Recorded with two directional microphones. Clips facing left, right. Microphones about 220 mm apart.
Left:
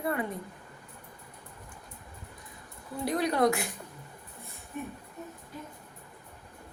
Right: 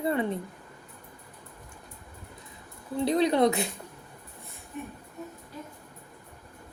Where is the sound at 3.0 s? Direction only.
25° right (ahead or behind).